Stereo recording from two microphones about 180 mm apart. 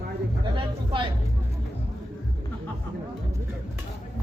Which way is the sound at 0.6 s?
25° right (ahead or behind).